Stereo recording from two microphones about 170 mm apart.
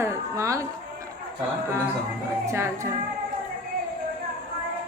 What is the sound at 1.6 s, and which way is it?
Speech, 15° right (ahead or behind).